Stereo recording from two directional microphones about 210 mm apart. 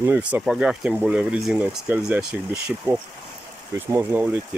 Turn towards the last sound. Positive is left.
turn(degrees=-10)  # may be behind; listen again after turning